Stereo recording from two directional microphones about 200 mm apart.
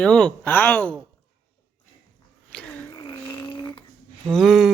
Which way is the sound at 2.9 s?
20° left (ahead or behind).